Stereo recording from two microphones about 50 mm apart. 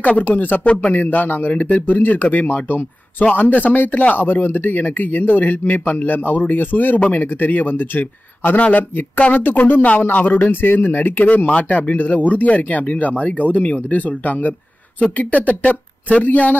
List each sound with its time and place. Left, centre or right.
0.0 s speech: left
7.0 s speech: left
7.2 s speech: left